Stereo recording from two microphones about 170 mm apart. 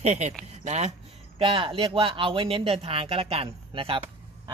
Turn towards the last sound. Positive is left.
turn(degrees=-30)  # may be behind; listen again after turning